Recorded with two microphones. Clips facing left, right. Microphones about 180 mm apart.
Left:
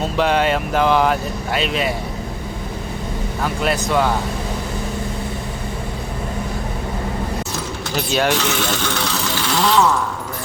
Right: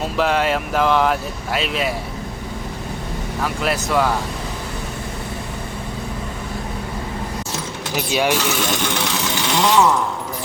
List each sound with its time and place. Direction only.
0.2 s speech: centre (ahead or behind)
3.4 s speech: centre (ahead or behind)
7.9 s speech: 10° right (ahead or behind)